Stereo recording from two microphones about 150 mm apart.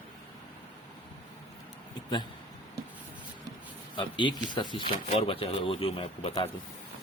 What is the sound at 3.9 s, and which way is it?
Speech, 30° left (ahead or behind).